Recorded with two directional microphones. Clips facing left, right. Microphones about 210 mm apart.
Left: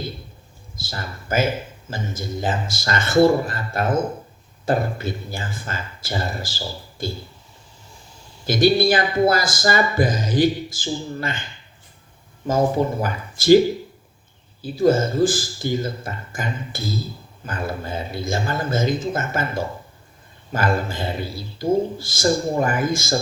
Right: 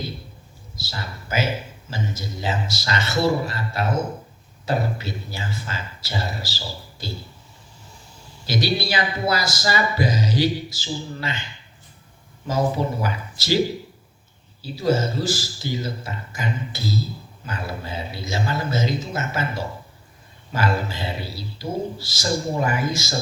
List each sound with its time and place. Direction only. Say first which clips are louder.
0.8 s a man's voice: left 1 dB; 50° left (ahead or behind)
8.4 s a man's voice: left 7 dB; 50° left (ahead or behind)
12.5 s a man's voice: left 4 dB; 50° left (ahead or behind)
14.6 s a man's voice: left 4 dB; 50° left (ahead or behind)